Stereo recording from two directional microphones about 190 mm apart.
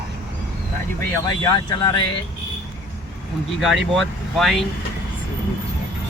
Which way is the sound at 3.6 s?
Centre (ahead or behind).